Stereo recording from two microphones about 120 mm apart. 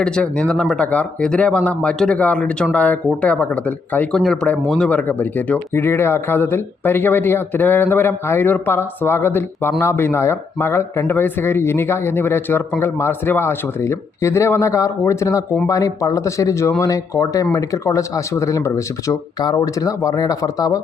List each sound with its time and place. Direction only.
0.0 s speech: 10° left (ahead or behind); by 20.8 s 30° left (ahead or behind)